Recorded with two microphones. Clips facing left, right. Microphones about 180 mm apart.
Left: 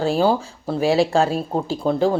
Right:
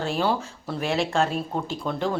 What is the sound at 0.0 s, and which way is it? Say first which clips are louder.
Speech: left 6 dB; 35° left (ahead or behind).